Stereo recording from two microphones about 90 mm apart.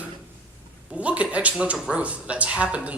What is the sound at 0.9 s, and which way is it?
Speech, 15° right (ahead or behind).